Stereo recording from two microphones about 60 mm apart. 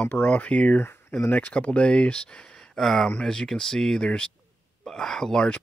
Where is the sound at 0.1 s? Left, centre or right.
Left.